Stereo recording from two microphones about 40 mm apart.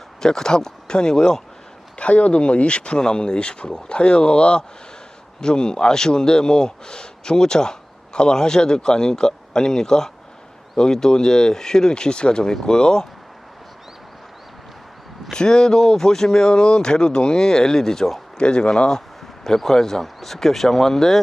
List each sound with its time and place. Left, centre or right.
0.2 s speech: centre
2.0 s speech: left; by 13.1 s centre
15.3 s speech: centre
18.3 s speech: left
19.5 s speech: centre